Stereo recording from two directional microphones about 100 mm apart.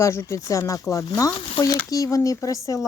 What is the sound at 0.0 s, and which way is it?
Speech, 30° left (ahead or behind).